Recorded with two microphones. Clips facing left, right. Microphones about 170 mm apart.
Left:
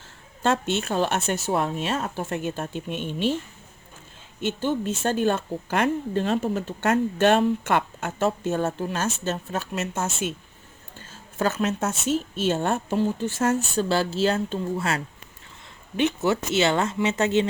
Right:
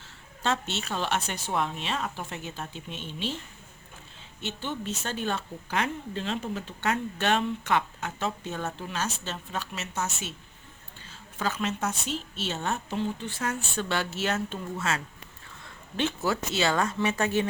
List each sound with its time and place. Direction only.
0.4 s a woman's voice: 50° left (ahead or behind)
4.4 s a woman's voice: 50° left (ahead or behind)
11.1 s a woman's voice: 45° left (ahead or behind)
16.0 s speech: 20° left (ahead or behind)